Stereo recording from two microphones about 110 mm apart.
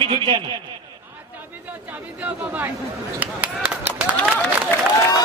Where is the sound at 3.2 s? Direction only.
10° right (ahead or behind).